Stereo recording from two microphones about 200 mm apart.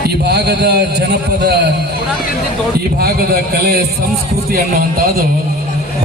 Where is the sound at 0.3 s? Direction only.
55° right (ahead or behind).